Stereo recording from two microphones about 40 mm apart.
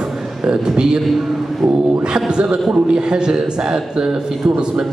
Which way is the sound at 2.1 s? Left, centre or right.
Centre.